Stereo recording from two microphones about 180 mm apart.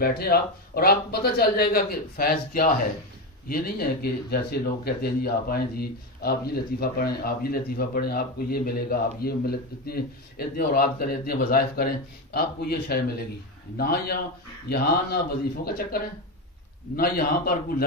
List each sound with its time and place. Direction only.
0.0 s speech: 60° left (ahead or behind)